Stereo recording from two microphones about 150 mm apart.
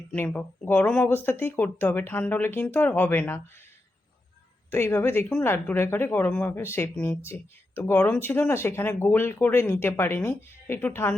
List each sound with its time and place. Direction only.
0.1 s speech: 10° left (ahead or behind)
4.7 s speech: 15° left (ahead or behind)